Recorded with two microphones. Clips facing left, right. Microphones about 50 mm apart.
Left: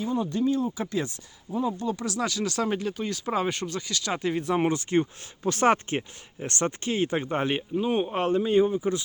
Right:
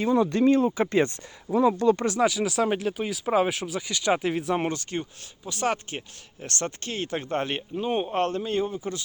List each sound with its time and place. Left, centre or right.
0.0 s speech: right
1.5 s speech: right
2.2 s speech: centre
4.2 s speech: centre
4.7 s speech: left
5.4 s speech: left; by 7.6 s centre
7.8 s speech: centre
8.1 s a man's voice: centre